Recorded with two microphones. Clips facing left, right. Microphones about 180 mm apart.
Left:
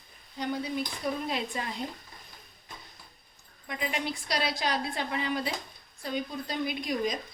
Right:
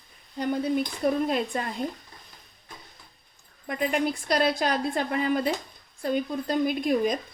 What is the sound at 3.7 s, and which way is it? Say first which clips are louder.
A woman's voice: right 7 dB; 50° right (ahead or behind).